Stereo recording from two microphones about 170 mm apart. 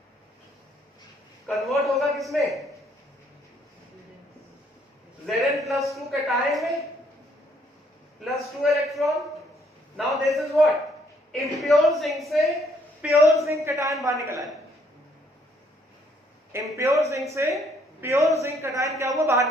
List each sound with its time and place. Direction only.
1.5 s a man's voice: centre (ahead or behind)
5.2 s a man's voice: centre (ahead or behind)
8.2 s a woman's voice: centre (ahead or behind)
13.4 s a woman's voice: 15° right (ahead or behind)
16.7 s speech: 15° right (ahead or behind)